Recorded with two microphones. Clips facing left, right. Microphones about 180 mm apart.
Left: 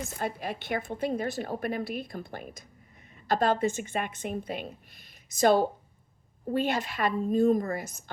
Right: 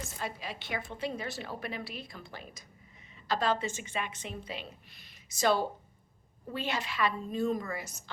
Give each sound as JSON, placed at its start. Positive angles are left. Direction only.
{"t": 0.2, "sound": "a woman's voice", "side_deg": 50}